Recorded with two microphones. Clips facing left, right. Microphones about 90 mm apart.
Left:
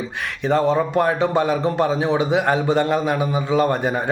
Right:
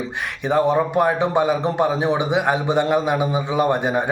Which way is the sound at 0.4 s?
15° right (ahead or behind).